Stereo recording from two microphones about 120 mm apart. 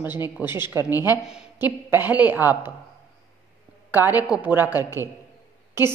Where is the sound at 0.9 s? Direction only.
30° left (ahead or behind).